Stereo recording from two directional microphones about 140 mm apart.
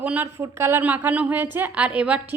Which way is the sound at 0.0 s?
10° right (ahead or behind).